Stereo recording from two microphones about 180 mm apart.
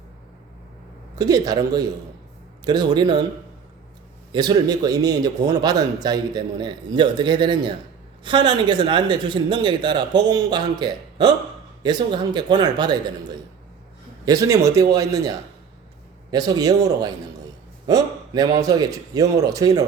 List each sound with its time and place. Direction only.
1.1 s a man's voice: 20° right (ahead or behind)
4.3 s a man's voice: 20° right (ahead or behind)
14.3 s a man's voice: 20° right (ahead or behind)